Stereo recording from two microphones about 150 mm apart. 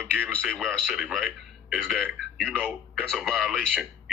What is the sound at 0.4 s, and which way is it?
Speech, 5° left (ahead or behind).